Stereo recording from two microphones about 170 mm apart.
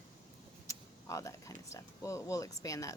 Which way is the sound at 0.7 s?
20° left (ahead or behind).